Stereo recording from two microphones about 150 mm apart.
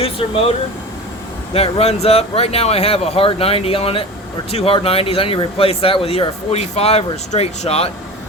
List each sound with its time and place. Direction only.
0.0 s speech: 40° left (ahead or behind)
1.5 s speech: 40° left (ahead or behind)